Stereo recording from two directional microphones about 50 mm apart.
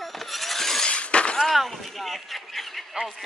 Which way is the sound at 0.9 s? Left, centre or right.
Left.